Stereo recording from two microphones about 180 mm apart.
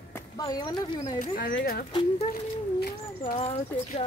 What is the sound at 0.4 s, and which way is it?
Speech, 25° left (ahead or behind).